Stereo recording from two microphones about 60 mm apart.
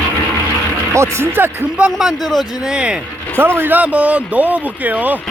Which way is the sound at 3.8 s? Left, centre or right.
Right.